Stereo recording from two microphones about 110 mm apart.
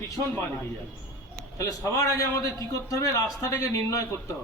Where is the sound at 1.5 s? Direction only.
30° left (ahead or behind).